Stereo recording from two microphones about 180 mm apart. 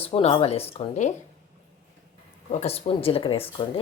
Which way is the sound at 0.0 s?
35° left (ahead or behind).